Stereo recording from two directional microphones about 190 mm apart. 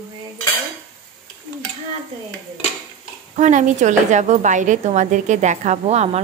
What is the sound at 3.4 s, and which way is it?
A woman's voice, 40° right (ahead or behind).